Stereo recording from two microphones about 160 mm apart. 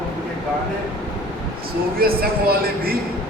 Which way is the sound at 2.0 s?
70° right (ahead or behind).